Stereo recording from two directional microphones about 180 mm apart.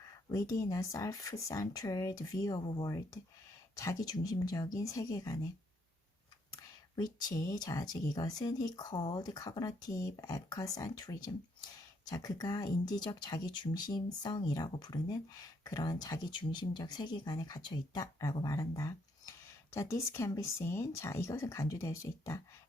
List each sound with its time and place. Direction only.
0.3 s speech: 20° left (ahead or behind)
6.9 s speech: 20° left (ahead or behind)